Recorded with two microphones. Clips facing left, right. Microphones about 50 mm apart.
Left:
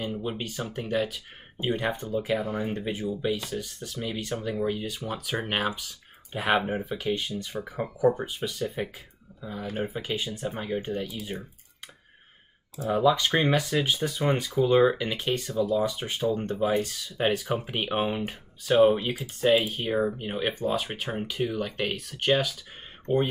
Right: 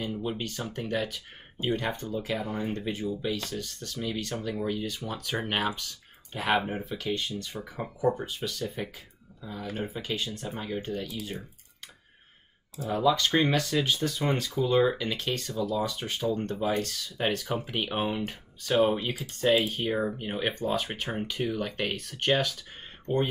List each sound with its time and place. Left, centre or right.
0.1 s speech: centre
1.7 s speech: centre
13.0 s speech: centre